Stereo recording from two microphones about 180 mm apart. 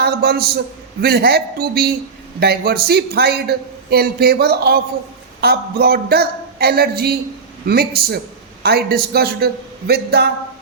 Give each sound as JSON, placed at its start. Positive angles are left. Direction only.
{"t": 0.0, "sound": "a man's voice", "side_deg": -60}